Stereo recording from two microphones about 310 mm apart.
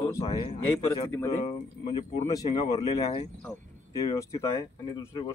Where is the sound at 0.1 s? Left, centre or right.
Centre.